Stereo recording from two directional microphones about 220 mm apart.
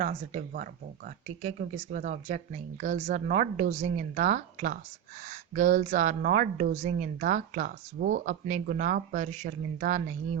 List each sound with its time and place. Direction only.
0.0 s speech: 35° right (ahead or behind)